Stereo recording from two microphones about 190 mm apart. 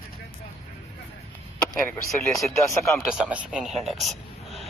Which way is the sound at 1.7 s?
10° left (ahead or behind).